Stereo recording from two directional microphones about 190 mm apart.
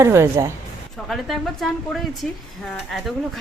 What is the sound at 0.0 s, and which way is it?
Speech, 15° right (ahead or behind).